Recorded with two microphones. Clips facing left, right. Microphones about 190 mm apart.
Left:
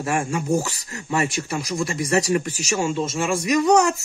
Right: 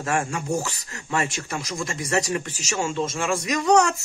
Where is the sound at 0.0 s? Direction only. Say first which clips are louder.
Left 2 dB; 10° left (ahead or behind).